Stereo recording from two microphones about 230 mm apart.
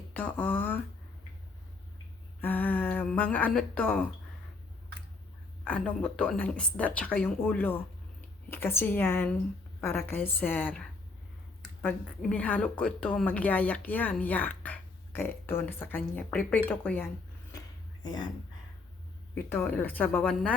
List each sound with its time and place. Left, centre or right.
0.1 s a woman's voice: centre
2.4 s speech: centre
5.6 s a woman's voice: centre
19.3 s a woman's voice: centre